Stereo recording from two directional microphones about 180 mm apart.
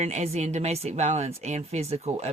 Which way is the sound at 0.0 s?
35° right (ahead or behind).